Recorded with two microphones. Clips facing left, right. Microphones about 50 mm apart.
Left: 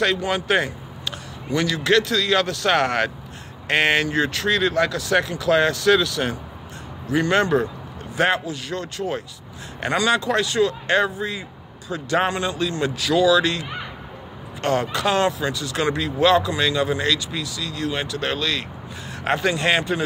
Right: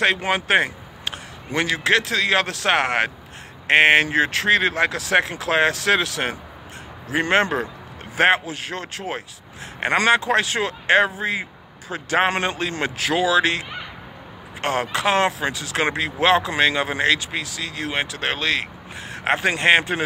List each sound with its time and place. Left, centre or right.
0.0 s a man's voice: right
2.7 s speech: right